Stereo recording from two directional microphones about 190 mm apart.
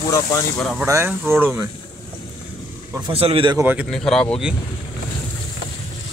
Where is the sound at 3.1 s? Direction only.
30° right (ahead or behind).